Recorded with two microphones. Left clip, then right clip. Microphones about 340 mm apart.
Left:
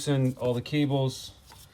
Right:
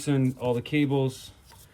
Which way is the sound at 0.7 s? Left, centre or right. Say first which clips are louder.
Right 2 dB; left.